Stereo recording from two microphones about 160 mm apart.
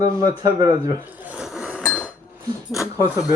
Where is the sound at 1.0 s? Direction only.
10° right (ahead or behind).